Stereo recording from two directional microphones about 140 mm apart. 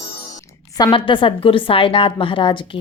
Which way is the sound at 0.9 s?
35° left (ahead or behind).